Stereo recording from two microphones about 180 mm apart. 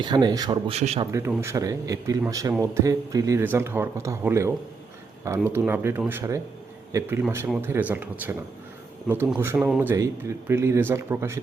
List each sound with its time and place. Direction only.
0.0 s a man's voice: 25° right (ahead or behind)
0.7 s a man's voice: 35° right (ahead or behind)
1.4 s speech: 15° right (ahead or behind)
9.9 s speech: 15° right (ahead or behind)